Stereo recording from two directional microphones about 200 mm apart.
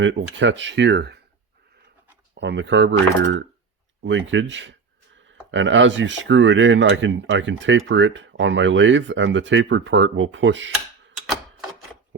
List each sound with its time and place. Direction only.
0.0 s speech: 70° right (ahead or behind)
2.3 s speech: 60° right (ahead or behind)